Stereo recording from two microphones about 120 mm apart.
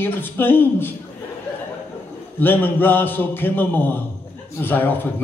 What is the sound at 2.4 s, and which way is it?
A man's voice, 15° left (ahead or behind).